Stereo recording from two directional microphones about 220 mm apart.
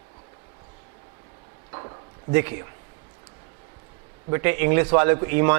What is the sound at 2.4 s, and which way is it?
Speech, 10° right (ahead or behind).